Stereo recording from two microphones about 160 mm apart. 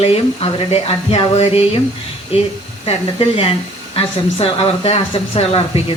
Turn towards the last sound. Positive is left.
turn(degrees=40)  # may be behind; listen again after turning